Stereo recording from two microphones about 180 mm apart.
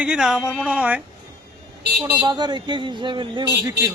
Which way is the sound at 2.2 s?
25° right (ahead or behind).